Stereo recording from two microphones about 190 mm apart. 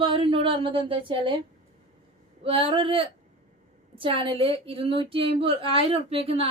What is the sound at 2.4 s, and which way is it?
A woman's voice, 30° right (ahead or behind).